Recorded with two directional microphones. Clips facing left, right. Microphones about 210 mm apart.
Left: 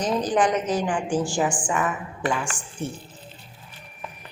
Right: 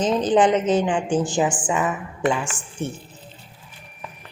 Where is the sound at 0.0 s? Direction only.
25° right (ahead or behind).